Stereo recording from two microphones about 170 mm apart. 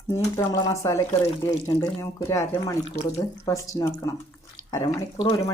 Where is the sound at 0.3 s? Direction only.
20° left (ahead or behind).